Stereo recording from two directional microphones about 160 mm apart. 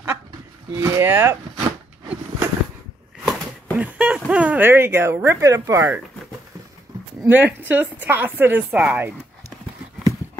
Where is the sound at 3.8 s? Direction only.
5° right (ahead or behind).